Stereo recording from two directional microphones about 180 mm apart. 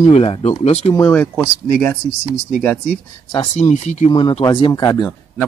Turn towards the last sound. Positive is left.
turn(degrees=25)  # may be behind; listen again after turning